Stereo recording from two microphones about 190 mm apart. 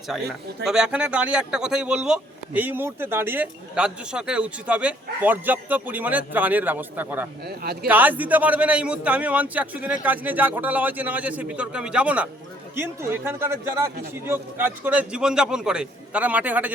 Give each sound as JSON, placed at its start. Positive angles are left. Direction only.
{"t": 0.6, "sound": "speech", "side_deg": -5}
{"t": 7.4, "sound": "speech", "side_deg": -55}
{"t": 7.9, "sound": "speech", "side_deg": -10}